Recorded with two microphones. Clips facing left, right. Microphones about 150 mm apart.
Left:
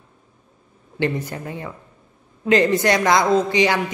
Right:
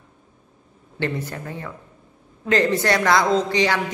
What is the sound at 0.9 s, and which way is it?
A man's voice, 15° left (ahead or behind).